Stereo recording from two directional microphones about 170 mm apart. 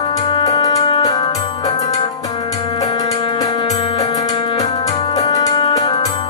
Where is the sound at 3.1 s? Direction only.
40° left (ahead or behind).